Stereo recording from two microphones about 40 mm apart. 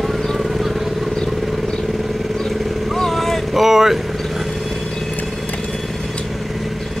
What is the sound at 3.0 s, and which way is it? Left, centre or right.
Boat, centre.